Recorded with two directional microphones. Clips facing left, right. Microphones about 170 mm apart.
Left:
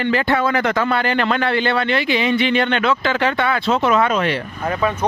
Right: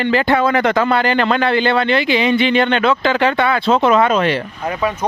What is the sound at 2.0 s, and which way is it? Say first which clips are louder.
Speech: right 3 dB; 90° right.